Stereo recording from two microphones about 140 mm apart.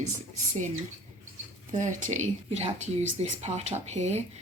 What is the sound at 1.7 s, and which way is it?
Speech, 60° right (ahead or behind).